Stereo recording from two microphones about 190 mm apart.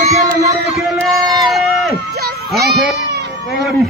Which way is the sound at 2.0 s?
55° right (ahead or behind).